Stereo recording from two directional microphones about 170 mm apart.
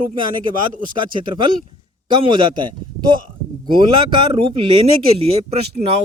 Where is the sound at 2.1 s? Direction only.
30° right (ahead or behind).